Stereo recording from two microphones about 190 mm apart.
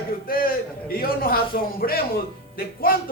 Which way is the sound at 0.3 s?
50° left (ahead or behind).